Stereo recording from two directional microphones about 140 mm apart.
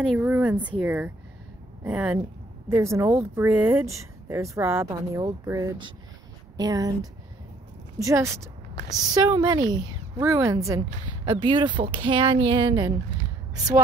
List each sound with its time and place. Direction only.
0.2 s speech: 10° right (ahead or behind)
11.1 s speech: 35° right (ahead or behind)